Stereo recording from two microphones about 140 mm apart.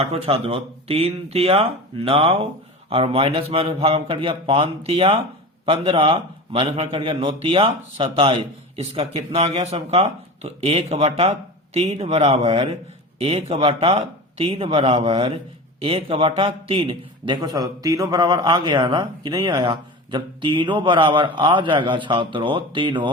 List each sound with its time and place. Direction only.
0.0 s a man's voice: 45° right (ahead or behind)